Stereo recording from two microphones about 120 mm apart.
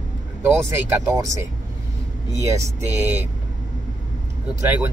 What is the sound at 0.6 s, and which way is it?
Speech, 25° right (ahead or behind).